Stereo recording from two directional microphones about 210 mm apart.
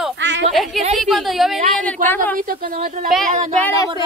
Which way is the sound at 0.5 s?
Centre (ahead or behind).